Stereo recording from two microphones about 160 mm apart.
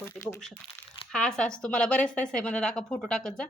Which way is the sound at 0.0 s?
15° left (ahead or behind).